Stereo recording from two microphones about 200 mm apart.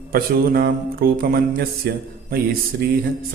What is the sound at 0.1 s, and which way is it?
Mantra, 45° right (ahead or behind).